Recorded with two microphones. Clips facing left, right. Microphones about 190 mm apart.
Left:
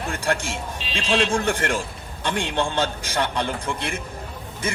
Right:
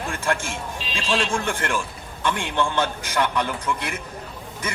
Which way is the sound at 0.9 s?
40° left (ahead or behind).